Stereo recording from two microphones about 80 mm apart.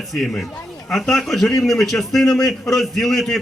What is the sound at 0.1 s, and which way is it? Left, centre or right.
A man's voice, centre.